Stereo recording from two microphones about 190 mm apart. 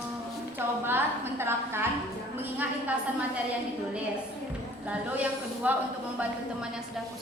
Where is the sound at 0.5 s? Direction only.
10° right (ahead or behind).